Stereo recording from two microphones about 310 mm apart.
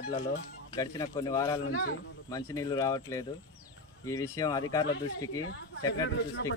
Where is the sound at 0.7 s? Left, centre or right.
Centre.